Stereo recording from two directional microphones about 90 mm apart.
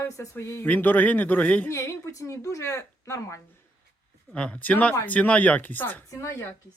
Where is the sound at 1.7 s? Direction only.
35° left (ahead or behind).